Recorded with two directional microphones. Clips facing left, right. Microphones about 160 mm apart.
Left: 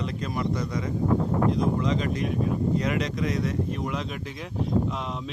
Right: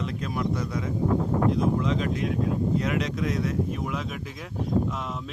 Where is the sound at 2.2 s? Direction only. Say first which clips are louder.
Even; 90° right.